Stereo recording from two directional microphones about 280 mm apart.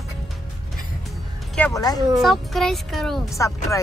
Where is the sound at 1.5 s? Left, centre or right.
Centre.